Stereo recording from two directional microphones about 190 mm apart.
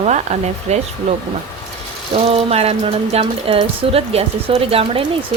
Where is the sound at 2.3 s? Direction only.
30° right (ahead or behind).